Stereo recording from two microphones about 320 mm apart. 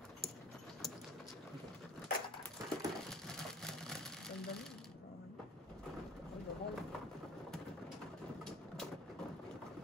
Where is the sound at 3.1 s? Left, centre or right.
Centre.